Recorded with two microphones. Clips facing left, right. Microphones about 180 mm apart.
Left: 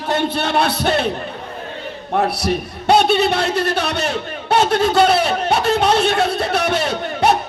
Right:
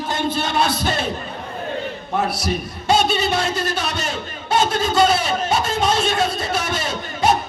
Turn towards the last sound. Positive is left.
turn(degrees=65)  # may be behind; listen again after turning